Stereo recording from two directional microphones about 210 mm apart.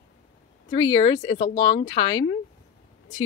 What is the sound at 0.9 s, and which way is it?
Speech, 25° left (ahead or behind).